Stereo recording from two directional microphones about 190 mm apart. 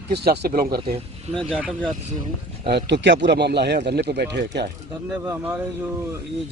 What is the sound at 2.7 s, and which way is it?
Speech, 65° right (ahead or behind).